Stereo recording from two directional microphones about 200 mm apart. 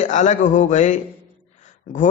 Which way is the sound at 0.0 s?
35° left (ahead or behind).